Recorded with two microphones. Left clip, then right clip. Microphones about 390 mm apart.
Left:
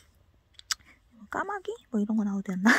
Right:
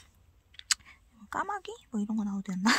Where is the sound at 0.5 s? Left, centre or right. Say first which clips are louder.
Right 3 dB; centre.